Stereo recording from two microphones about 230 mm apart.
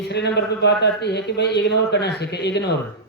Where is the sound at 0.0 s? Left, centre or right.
Left.